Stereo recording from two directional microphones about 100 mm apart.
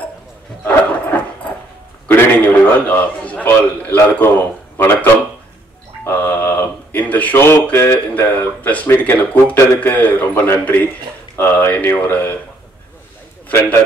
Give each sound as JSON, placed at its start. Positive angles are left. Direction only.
{"t": 2.0, "sound": "a sound", "side_deg": 20}
{"t": 6.0, "sound": "speech", "side_deg": 20}
{"t": 13.5, "sound": "a man's voice", "side_deg": 20}